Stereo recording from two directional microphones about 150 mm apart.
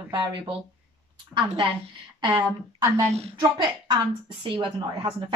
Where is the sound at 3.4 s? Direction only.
30° right (ahead or behind).